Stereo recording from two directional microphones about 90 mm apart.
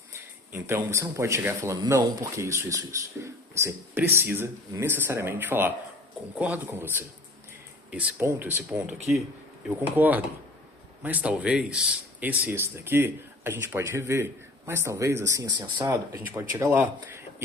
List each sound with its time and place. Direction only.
0.1 s a man's voice: 30° right (ahead or behind)
8.2 s speech: 25° right (ahead or behind)
9.6 s speech: 20° right (ahead or behind); by 15.4 s 35° right (ahead or behind)
15.4 s speech: 50° right (ahead or behind)
16.1 s speech: 30° right (ahead or behind)